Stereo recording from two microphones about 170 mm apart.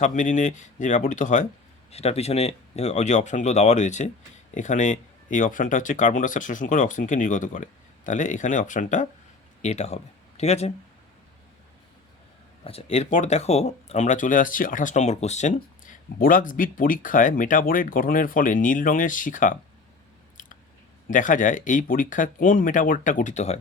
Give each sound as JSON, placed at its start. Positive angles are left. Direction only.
{"t": 0.0, "sound": "speech", "side_deg": 50}
{"t": 12.6, "sound": "speech", "side_deg": 40}
{"t": 21.1, "sound": "speech", "side_deg": 50}